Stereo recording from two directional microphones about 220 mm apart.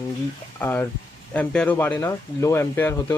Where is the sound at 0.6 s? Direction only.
10° left (ahead or behind).